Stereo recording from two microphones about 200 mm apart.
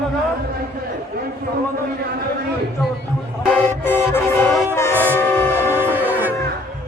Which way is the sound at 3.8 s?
10° left (ahead or behind).